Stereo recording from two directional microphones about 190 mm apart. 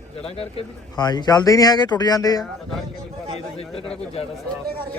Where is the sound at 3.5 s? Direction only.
30° left (ahead or behind).